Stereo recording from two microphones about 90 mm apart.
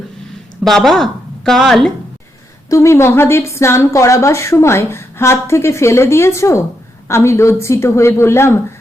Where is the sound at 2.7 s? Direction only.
30° left (ahead or behind).